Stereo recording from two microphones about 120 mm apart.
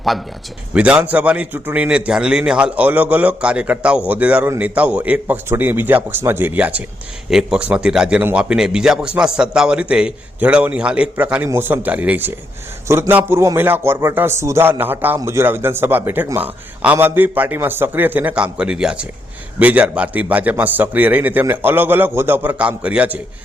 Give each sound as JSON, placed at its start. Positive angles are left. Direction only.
{"t": 0.7, "sound": "a man's voice", "side_deg": -10}